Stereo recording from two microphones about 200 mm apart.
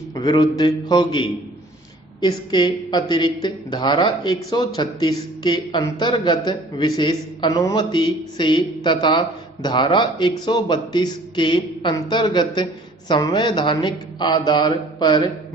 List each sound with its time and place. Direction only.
0.1 s speech: 20° left (ahead or behind)